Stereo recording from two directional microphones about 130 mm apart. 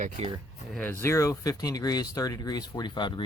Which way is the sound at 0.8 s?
20° left (ahead or behind).